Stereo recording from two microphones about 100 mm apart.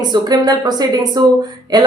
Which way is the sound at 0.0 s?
45° right (ahead or behind).